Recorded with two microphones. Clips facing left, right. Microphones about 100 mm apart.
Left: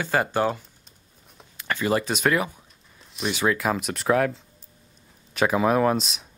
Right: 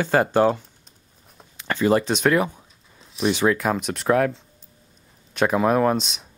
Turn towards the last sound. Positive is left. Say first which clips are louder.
# right 1 dB
turn(degrees=0)  # may be behind; listen again after turning